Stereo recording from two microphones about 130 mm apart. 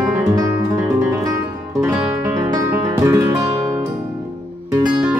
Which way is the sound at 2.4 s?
25° right (ahead or behind).